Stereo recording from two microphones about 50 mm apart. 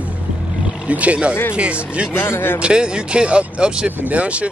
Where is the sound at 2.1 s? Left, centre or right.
Left.